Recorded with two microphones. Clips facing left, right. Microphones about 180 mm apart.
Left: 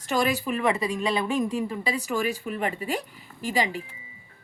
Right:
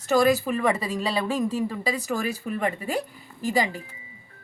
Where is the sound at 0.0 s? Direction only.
40° right (ahead or behind).